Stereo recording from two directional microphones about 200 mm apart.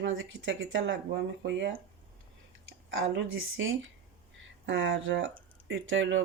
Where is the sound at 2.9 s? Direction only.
80° right.